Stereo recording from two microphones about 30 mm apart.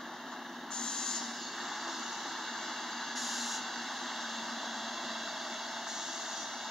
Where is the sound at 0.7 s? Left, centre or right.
Left.